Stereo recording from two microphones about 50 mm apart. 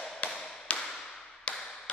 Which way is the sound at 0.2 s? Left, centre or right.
Left.